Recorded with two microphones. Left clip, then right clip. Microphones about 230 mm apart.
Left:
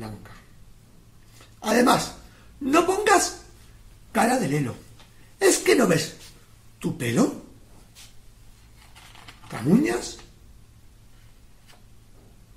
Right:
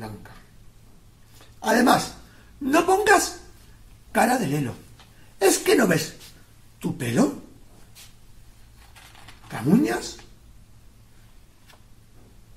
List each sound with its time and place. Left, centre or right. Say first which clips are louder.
1.6 s a woman's voice: right 1 dB; centre
9.5 s a woman's voice: even; centre